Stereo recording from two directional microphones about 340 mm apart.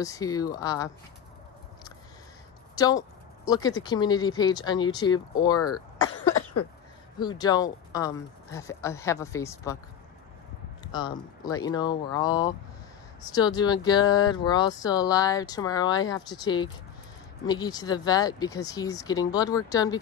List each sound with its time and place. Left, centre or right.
0.0 s speech: centre
2.7 s speech: centre
6.0 s cough: left
7.2 s speech: centre
10.8 s speech: centre